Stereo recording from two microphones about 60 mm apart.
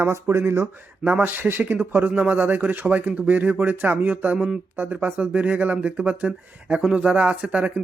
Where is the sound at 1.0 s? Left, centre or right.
Right.